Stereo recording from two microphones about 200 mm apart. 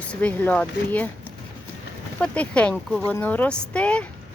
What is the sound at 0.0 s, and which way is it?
Speech, 5° left (ahead or behind).